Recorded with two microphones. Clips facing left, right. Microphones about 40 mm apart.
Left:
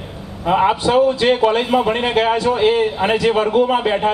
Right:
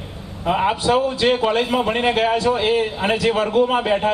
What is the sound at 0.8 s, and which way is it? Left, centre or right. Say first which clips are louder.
A man's voice: left 2 dB; left.